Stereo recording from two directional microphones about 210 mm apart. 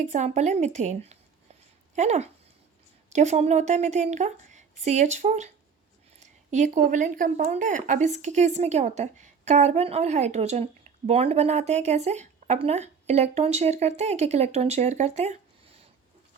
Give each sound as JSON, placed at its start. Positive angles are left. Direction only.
{"t": 0.0, "sound": "speech", "side_deg": -35}